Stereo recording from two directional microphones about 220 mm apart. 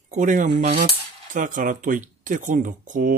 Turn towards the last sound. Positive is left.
turn(degrees=-35)  # may be behind; listen again after turning